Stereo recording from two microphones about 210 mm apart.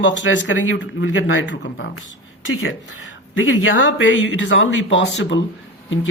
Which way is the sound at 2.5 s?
70° left (ahead or behind).